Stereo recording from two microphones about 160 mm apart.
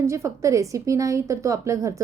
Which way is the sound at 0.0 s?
20° right (ahead or behind).